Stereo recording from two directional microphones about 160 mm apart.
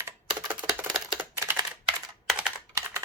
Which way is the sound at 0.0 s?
10° right (ahead or behind).